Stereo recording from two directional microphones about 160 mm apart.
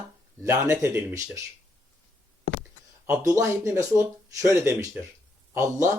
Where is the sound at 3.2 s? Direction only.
20° right (ahead or behind).